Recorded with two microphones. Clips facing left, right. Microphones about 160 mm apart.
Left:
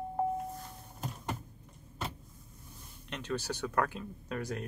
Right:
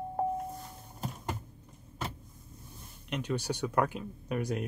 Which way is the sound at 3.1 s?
15° right (ahead or behind).